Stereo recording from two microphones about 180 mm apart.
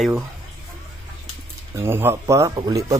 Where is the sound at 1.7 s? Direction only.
15° right (ahead or behind).